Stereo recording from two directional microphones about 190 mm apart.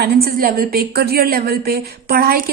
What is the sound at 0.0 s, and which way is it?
A woman's voice, 50° right (ahead or behind).